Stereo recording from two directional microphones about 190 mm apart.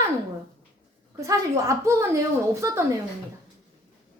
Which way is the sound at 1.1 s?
15° right (ahead or behind).